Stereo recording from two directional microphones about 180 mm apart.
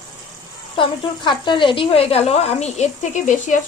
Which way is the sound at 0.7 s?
25° left (ahead or behind).